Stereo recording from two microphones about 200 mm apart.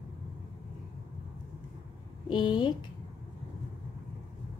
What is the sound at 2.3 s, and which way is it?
Speech, 20° left (ahead or behind).